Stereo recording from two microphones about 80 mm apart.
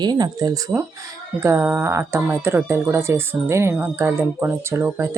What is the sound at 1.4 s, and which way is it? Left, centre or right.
Speech, right.